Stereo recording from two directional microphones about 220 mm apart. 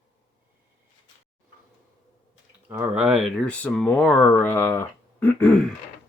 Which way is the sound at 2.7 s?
10° right (ahead or behind).